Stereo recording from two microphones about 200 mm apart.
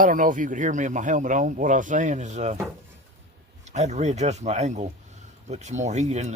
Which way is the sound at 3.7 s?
35° right (ahead or behind).